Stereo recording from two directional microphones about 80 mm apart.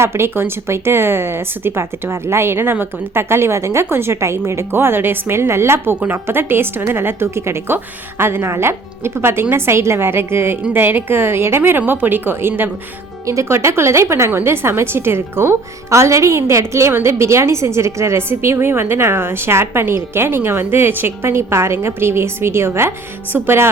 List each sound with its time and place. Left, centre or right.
0.0 s a woman's voice: right
13.2 s a woman's voice: right